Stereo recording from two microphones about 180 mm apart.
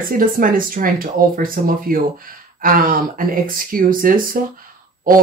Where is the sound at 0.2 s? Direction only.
50° right (ahead or behind).